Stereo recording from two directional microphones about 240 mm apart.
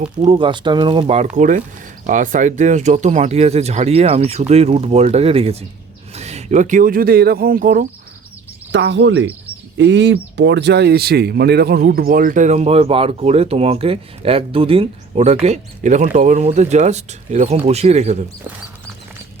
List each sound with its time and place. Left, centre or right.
0.0 s speech: right
8.7 s speech: right